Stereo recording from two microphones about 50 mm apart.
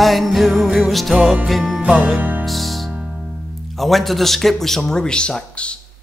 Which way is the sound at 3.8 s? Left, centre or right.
Centre.